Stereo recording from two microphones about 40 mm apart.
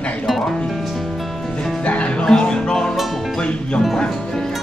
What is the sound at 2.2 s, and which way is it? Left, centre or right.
Music, centre.